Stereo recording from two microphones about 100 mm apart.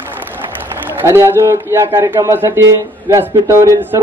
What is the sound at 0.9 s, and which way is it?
Speech, 25° right (ahead or behind).